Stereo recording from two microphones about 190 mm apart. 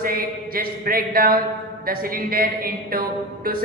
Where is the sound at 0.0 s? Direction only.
50° right (ahead or behind).